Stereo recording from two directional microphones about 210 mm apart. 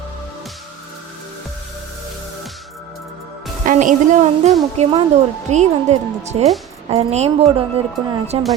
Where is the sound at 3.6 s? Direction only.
40° right (ahead or behind).